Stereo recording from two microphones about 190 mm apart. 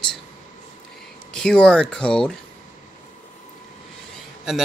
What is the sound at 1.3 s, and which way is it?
Speech, 5° left (ahead or behind).